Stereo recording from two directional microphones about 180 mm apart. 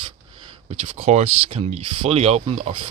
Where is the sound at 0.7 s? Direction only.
35° right (ahead or behind).